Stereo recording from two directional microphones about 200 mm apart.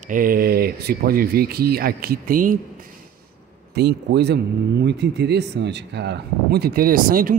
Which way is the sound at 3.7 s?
55° right (ahead or behind).